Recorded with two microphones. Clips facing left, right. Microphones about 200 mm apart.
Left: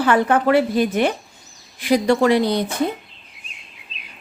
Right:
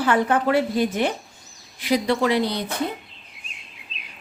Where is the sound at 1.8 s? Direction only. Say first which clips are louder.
Left 5 dB; 50° left (ahead or behind).